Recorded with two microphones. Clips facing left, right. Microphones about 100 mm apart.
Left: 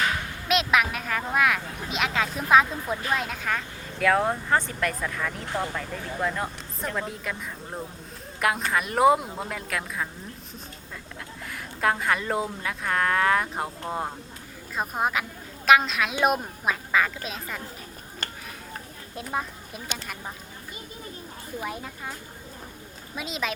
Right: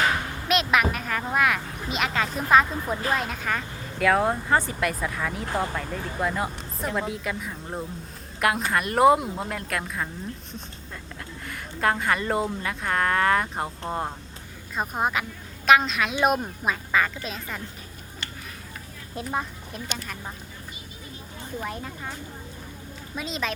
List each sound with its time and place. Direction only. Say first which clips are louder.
0.4 s speech: even; centre (ahead or behind)
11.4 s a woman's voice: right 1 dB; centre (ahead or behind)
18.2 s a sound: left 2 dB; 45° left (ahead or behind)
19.1 s speech: right 1 dB; centre (ahead or behind)
21.6 s speech: even; 5° left (ahead or behind)
23.1 s speech: right 1 dB; 5° left (ahead or behind)